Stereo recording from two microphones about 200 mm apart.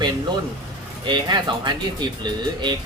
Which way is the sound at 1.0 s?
20° right (ahead or behind).